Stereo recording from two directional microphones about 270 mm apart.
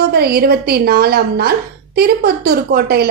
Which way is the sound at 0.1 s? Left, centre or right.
Right.